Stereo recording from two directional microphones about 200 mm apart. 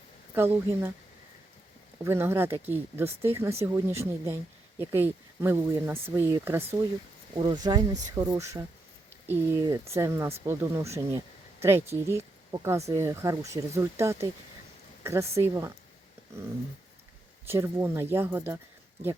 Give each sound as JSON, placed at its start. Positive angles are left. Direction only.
{"t": 0.3, "sound": "speech", "side_deg": -10}
{"t": 2.0, "sound": "speech", "side_deg": -10}
{"t": 17.4, "sound": "speech", "side_deg": -15}